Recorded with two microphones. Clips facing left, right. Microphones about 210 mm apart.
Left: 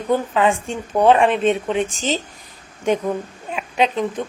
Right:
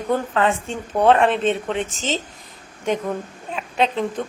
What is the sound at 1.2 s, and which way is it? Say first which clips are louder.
Speech: left 2 dB; 25° right (ahead or behind).